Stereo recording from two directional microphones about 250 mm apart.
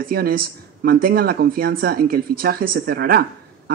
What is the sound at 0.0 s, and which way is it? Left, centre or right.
Speech, right.